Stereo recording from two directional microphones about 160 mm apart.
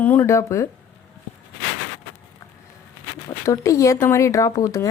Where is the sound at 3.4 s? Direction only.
20° left (ahead or behind).